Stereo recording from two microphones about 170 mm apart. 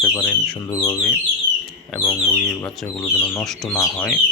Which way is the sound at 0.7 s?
20° left (ahead or behind).